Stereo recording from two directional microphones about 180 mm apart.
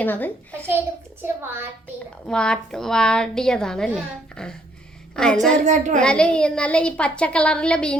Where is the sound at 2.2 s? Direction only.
5° left (ahead or behind).